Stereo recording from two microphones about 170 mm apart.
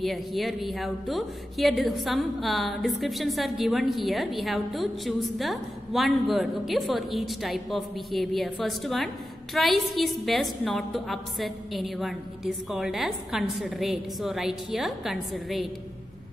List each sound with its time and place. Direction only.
0.0 s a woman's voice: centre (ahead or behind)